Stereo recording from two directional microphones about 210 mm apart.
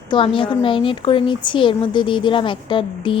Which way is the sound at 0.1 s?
25° left (ahead or behind).